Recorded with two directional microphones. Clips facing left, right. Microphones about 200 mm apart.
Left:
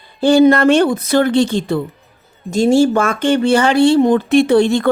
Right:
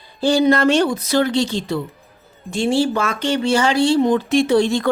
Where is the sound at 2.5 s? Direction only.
45° left (ahead or behind); by 4.9 s 60° left (ahead or behind).